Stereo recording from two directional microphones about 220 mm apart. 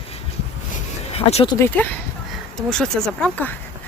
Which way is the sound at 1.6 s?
10° left (ahead or behind).